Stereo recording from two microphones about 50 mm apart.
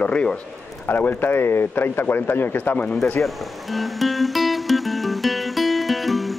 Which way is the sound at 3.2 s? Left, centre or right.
Centre.